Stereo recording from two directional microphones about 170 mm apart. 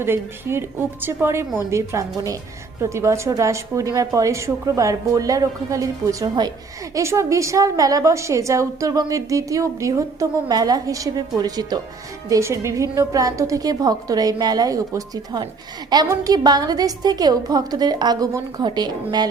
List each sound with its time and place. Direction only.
0.0 s a woman's voice: 15° right (ahead or behind)